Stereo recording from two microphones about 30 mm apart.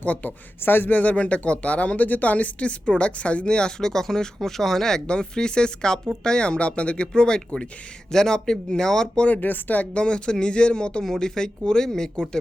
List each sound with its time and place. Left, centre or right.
0.0 s a woman's voice: left
3.4 s speech: left
3.8 s speech: centre
5.0 s speech: left
7.1 s speech: left
9.3 s speech: left
9.9 s speech: left
11.0 s speech: centre